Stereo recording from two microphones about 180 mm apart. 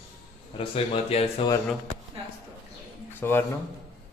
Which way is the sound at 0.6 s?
30° left (ahead or behind).